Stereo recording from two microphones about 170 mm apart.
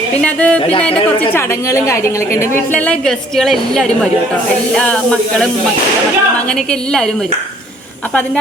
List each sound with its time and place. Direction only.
0.2 s a woman's voice: 5° left (ahead or behind)
6.5 s a woman's voice: 5° left (ahead or behind)